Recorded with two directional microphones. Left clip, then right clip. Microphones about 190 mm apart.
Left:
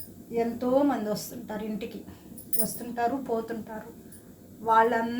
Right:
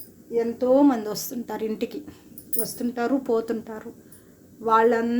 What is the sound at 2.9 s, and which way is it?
Speech, 65° right (ahead or behind).